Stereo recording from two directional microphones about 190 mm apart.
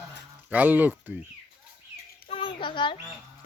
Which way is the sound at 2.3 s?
25° left (ahead or behind).